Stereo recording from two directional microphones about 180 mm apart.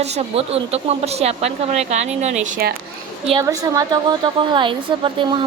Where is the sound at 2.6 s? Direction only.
60° right (ahead or behind).